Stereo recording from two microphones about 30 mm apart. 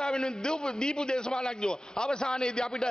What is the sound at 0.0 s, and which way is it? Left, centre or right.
A man's voice, left.